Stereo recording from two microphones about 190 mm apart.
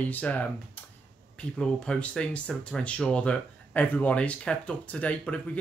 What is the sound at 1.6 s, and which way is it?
Speech, 5° left (ahead or behind).